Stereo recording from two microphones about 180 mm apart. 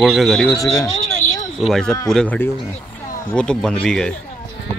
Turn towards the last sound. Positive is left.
turn(degrees=5)  # may be behind; listen again after turning